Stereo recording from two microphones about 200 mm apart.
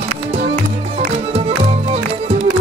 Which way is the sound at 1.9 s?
30° right (ahead or behind).